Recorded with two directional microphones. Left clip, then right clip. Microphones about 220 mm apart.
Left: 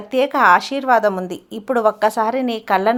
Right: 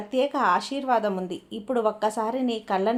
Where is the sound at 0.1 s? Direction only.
25° left (ahead or behind).